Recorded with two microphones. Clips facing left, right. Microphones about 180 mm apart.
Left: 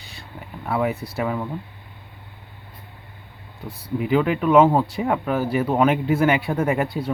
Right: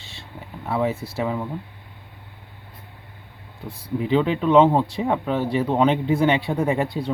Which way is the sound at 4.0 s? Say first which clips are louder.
Even; 25° right (ahead or behind).